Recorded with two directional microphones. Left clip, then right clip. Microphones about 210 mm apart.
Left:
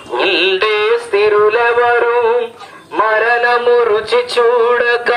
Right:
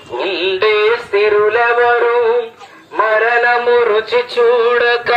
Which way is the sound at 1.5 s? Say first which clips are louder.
Even; 5° right (ahead or behind).